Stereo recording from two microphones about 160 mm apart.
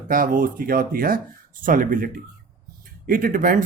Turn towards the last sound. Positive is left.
turn(degrees=-55)  # may be behind; listen again after turning